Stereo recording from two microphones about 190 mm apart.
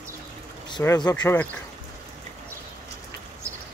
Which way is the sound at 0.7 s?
20° left (ahead or behind).